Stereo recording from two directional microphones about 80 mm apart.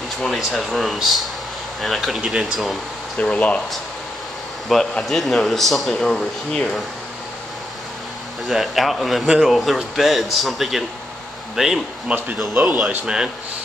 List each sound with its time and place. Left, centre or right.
0.2 s a man's voice: centre
3.2 s speech: centre
4.7 s a man's voice: centre
8.5 s a man's voice: centre